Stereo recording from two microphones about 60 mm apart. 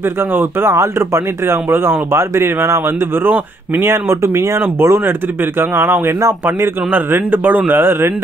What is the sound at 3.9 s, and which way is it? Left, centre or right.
Speech, right.